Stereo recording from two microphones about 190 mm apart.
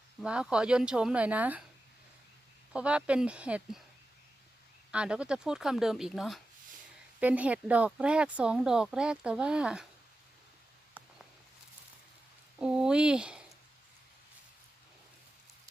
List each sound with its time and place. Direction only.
0.2 s speech: 5° right (ahead or behind)
2.7 s speech: 5° right (ahead or behind)
4.9 s speech: 5° right (ahead or behind)
12.5 s speech: 5° right (ahead or behind)